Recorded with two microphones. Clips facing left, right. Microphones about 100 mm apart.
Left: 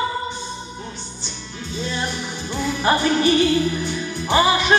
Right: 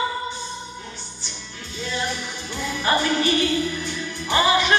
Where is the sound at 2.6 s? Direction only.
20° left (ahead or behind).